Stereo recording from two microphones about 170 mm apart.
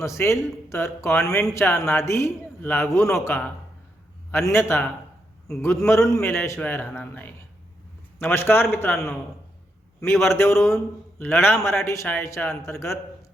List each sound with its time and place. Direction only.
0.2 s a man's voice: 15° left (ahead or behind)
1.2 s speech: 5° left (ahead or behind)
1.5 s a man's voice: 15° left (ahead or behind)
10.3 s a man's voice: 15° left (ahead or behind)